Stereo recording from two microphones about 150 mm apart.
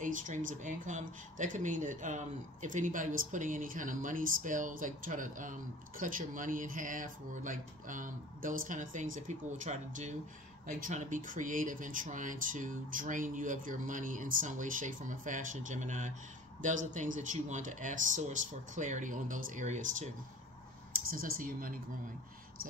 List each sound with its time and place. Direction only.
0.0 s speech: 60° right (ahead or behind)
21.1 s speech: 70° right (ahead or behind)